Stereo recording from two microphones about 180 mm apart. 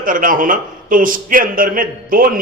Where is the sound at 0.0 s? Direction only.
50° right (ahead or behind).